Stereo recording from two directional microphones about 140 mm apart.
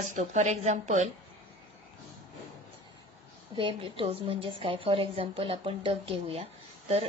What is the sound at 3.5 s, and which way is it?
A woman's voice, 40° right (ahead or behind).